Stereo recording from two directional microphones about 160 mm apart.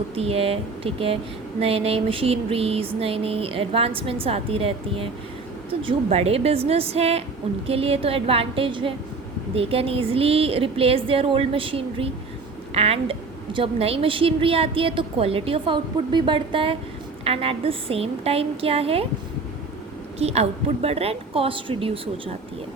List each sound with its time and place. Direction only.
0.1 s speech: 40° right (ahead or behind)
20.1 s speech: 40° right (ahead or behind)